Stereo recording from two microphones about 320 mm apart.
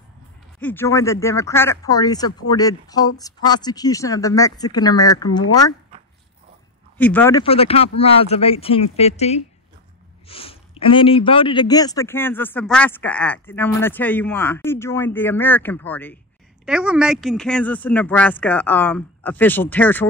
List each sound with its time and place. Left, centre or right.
0.6 s speech: centre
7.0 s speech: centre